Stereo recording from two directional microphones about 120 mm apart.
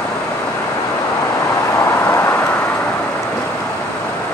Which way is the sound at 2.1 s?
20° left (ahead or behind).